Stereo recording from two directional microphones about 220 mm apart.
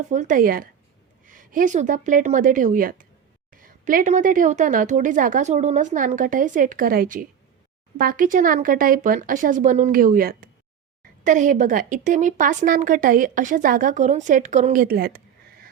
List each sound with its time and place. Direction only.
0.1 s a woman's voice: 35° right (ahead or behind)